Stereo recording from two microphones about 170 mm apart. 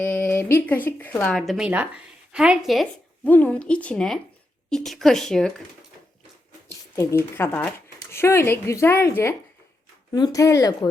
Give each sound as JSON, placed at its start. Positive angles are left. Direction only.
{"t": 0.0, "sound": "speech", "side_deg": 10}
{"t": 3.2, "sound": "a woman's voice", "side_deg": 10}
{"t": 6.9, "sound": "a woman's voice", "side_deg": 15}